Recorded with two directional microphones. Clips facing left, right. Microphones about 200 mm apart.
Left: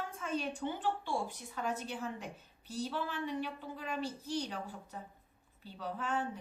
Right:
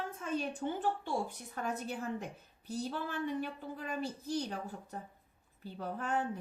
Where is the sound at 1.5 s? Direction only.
45° right (ahead or behind).